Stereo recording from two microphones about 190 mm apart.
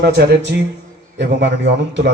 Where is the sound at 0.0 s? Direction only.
55° right (ahead or behind).